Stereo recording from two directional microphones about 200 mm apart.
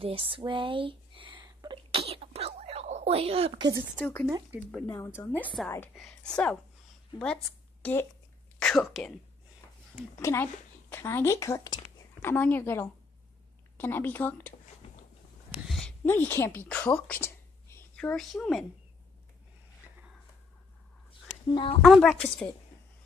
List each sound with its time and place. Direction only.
0.0 s a sound: 30° right (ahead or behind)
3.9 s a woman's voice: 10° left (ahead or behind)
10.2 s a woman's voice: 10° left (ahead or behind)
15.7 s a woman's voice: 5° left (ahead or behind)
21.5 s speech: 25° left (ahead or behind)
21.8 s a woman's voice: centre (ahead or behind)